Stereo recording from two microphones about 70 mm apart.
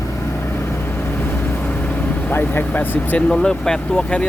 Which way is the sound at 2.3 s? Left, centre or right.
Left.